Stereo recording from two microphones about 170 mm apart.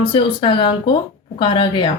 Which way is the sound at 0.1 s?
30° left (ahead or behind).